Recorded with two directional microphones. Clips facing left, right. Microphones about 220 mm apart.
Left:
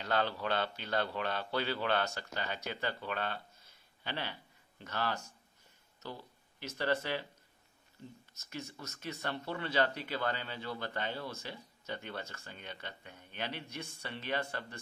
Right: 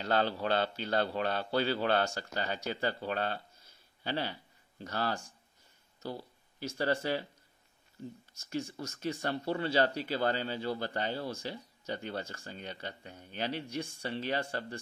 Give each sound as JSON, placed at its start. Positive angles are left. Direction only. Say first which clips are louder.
{"t": 0.0, "sound": "speech", "louder": "right 3 dB", "side_deg": -35}
{"t": 6.6, "sound": "speech", "louder": "right 3 dB", "side_deg": -30}
{"t": 8.4, "sound": "speech", "louder": "right 8 dB", "side_deg": -30}